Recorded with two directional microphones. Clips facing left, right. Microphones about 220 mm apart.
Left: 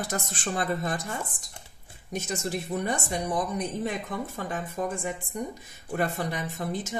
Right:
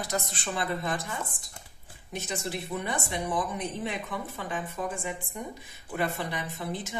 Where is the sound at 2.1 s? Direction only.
45° left (ahead or behind).